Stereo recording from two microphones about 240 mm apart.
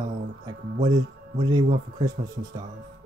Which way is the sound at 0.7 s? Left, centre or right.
Centre.